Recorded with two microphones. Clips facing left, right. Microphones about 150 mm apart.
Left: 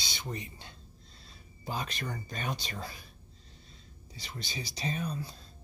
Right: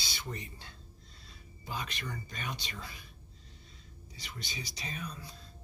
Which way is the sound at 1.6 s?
35° left (ahead or behind).